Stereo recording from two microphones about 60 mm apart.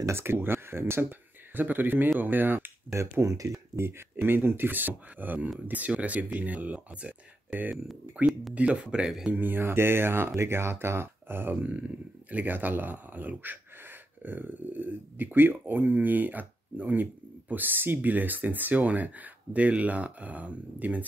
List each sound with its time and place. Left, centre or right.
0.0 s speech: right
1.5 s speech: right
2.9 s speech: right
4.2 s speech: right
8.2 s speech: right
9.3 s speech: right